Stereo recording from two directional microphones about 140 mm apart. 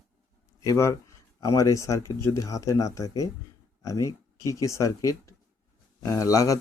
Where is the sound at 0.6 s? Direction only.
20° left (ahead or behind).